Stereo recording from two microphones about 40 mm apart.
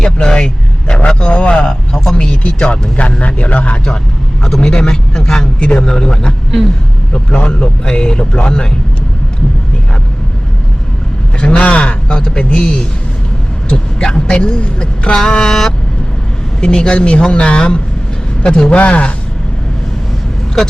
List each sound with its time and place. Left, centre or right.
0.0 s a man's voice: centre
4.4 s speech: centre
11.3 s speech: left